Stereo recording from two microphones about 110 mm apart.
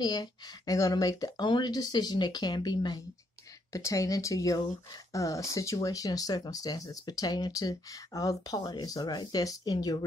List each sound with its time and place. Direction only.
0.0 s speech: 35° left (ahead or behind)
3.7 s speech: 30° left (ahead or behind)